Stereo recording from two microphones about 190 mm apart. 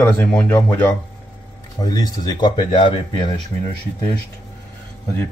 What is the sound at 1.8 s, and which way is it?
Speech, 20° left (ahead or behind).